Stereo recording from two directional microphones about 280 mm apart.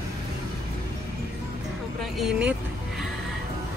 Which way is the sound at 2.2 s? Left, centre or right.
Centre.